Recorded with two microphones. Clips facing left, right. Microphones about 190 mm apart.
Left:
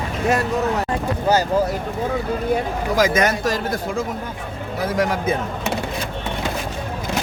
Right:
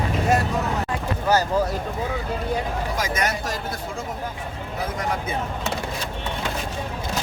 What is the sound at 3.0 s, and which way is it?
Speech, 90° left.